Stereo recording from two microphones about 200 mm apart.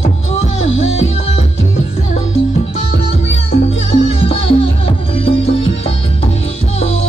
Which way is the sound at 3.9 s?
30° left (ahead or behind).